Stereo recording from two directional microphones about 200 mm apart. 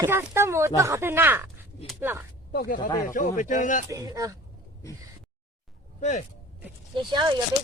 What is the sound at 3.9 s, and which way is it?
Speech, 15° right (ahead or behind).